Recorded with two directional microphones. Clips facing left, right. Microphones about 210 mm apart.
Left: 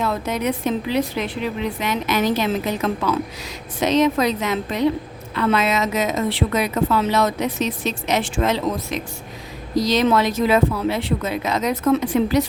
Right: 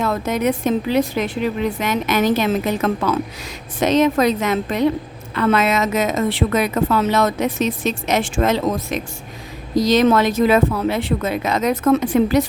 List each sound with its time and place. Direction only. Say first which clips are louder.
0.0 s a woman's voice: right 3 dB; 50° right (ahead or behind)